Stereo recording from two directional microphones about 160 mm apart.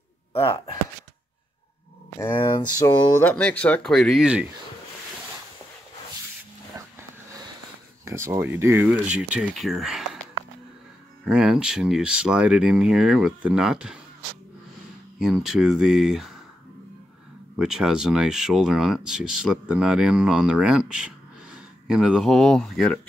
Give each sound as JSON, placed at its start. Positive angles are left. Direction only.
{"t": 0.3, "sound": "speech", "side_deg": 35}
{"t": 2.1, "sound": "speech", "side_deg": 15}
{"t": 3.2, "sound": "speech", "side_deg": 10}
{"t": 6.7, "sound": "a sound", "side_deg": -20}
{"t": 8.0, "sound": "speech", "side_deg": -15}
{"t": 11.2, "sound": "speech", "side_deg": -5}
{"t": 15.1, "sound": "speech", "side_deg": 0}
{"t": 17.6, "sound": "speech", "side_deg": -5}